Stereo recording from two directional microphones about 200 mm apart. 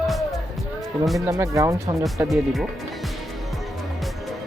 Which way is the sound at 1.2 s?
15° right (ahead or behind).